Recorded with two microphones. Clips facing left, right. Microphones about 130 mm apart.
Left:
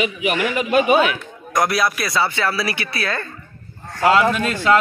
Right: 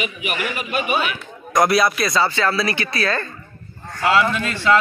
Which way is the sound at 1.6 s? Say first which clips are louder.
Right 3 dB; centre (ahead or behind).